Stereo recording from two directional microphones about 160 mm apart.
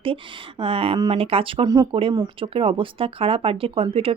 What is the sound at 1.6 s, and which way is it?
Speech, 25° right (ahead or behind).